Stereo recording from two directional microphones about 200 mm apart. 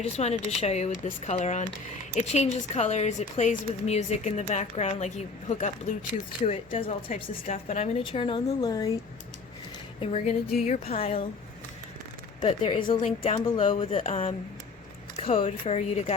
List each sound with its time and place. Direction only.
0.0 s a woman's voice: 30° left (ahead or behind)
10.0 s a woman's voice: 30° left (ahead or behind)
12.4 s a woman's voice: 25° left (ahead or behind)